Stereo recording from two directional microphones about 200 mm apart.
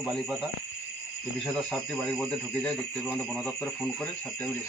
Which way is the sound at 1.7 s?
5° left (ahead or behind).